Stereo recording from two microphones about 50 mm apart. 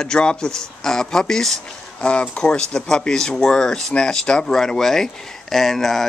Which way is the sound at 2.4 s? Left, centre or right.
Centre.